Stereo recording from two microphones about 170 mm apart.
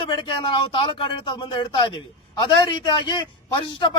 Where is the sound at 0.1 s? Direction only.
30° left (ahead or behind).